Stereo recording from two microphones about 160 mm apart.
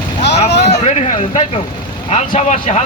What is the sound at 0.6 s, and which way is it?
Speech, 45° left (ahead or behind).